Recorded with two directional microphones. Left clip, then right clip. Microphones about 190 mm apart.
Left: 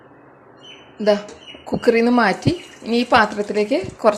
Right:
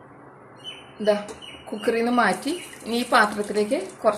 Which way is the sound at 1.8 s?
30° left (ahead or behind).